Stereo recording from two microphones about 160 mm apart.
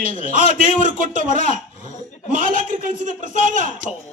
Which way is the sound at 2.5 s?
55° right (ahead or behind).